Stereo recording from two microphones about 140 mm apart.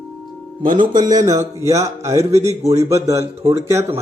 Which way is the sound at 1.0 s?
25° right (ahead or behind).